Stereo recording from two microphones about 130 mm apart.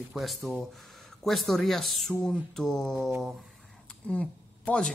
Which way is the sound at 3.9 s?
10° left (ahead or behind).